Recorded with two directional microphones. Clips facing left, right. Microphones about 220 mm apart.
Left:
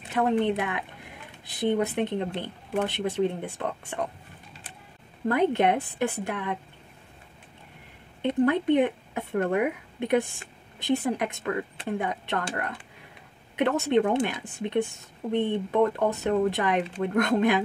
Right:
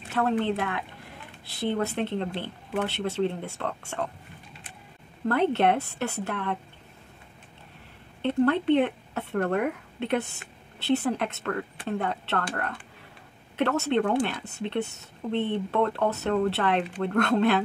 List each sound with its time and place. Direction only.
0.1 s a woman's voice: 15° left (ahead or behind)
5.3 s speech: 15° left (ahead or behind)
8.2 s speech: 15° left (ahead or behind)
13.6 s speech: 15° left (ahead or behind)